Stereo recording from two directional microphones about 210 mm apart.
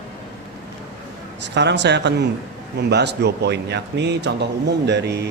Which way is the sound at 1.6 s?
55° right (ahead or behind).